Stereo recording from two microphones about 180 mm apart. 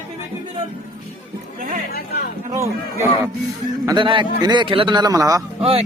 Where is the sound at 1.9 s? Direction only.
60° left (ahead or behind).